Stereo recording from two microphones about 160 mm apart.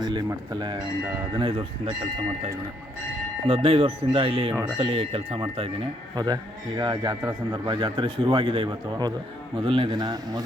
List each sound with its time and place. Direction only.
0.0 s speech: 25° right (ahead or behind)
3.4 s speech: 35° right (ahead or behind)